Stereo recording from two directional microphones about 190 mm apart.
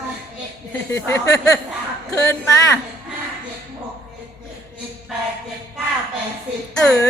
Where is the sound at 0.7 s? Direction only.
15° left (ahead or behind).